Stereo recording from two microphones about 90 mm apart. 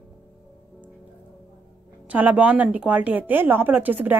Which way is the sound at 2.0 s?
15° right (ahead or behind).